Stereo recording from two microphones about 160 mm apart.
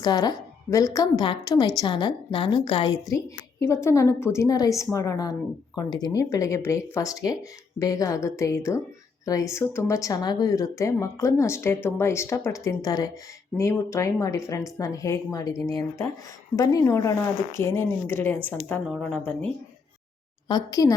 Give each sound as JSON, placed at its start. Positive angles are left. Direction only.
{"t": 0.0, "sound": "a woman's voice", "side_deg": 25}
{"t": 20.5, "sound": "a woman's voice", "side_deg": 25}